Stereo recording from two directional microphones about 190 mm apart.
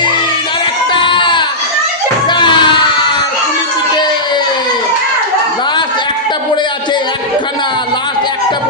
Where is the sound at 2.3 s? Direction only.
25° left (ahead or behind).